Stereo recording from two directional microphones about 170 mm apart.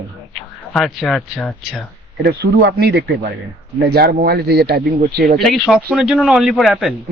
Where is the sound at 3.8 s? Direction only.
60° right (ahead or behind).